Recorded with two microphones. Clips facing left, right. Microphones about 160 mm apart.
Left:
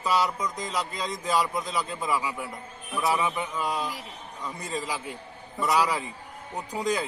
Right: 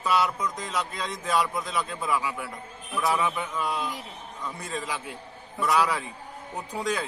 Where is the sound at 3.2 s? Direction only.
15° left (ahead or behind).